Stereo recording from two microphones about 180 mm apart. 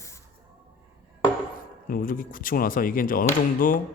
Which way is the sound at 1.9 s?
50° left (ahead or behind).